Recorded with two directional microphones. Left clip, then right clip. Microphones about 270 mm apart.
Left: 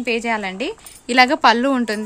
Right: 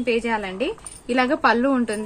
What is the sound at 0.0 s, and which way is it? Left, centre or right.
A woman's voice, left.